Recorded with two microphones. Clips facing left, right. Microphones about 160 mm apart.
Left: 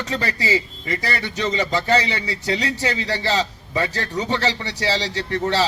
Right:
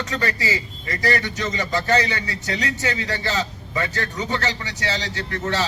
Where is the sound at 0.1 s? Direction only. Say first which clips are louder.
Left 5 dB; 30° left (ahead or behind).